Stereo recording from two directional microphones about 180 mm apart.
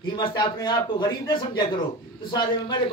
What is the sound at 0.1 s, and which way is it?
A man's voice, 25° left (ahead or behind).